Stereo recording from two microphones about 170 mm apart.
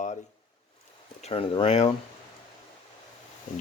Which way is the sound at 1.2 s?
35° left (ahead or behind).